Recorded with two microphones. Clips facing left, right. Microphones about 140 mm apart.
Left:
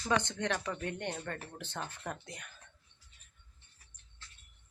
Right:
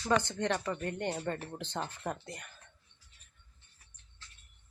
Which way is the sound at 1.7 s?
15° right (ahead or behind).